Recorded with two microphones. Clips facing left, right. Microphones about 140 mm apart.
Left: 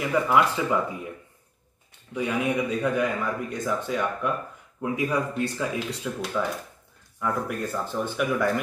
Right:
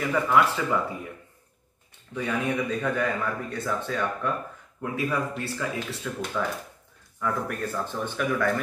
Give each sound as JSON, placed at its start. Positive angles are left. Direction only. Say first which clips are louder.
{"t": 0.1, "sound": "a man's voice", "louder": "left 1 dB", "side_deg": 10}
{"t": 2.1, "sound": "a man's voice", "louder": "left 2 dB", "side_deg": 15}